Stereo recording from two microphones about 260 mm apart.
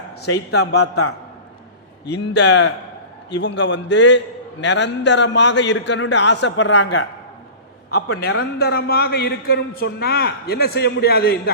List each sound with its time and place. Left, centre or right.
0.8 s a man's voice: left
2.0 s a man's voice: left